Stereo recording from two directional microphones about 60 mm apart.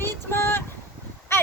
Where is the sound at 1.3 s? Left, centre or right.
Left.